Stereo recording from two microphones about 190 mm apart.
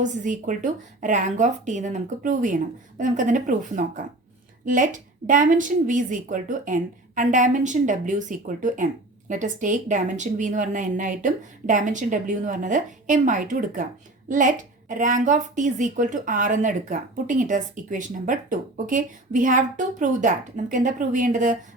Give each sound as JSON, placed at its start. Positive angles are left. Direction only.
{"t": 0.0, "sound": "a woman's voice", "side_deg": -40}